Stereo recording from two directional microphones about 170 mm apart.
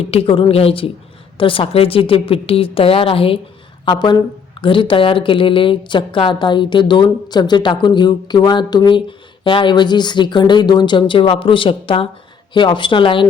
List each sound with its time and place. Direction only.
0.0 s a woman's voice: 35° left (ahead or behind)